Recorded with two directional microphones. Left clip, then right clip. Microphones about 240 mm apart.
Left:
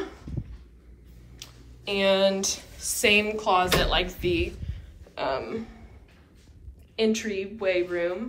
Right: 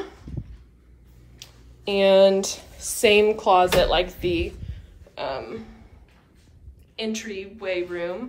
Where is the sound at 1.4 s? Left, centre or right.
Centre.